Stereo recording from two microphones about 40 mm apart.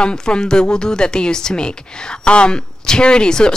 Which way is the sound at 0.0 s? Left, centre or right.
Left.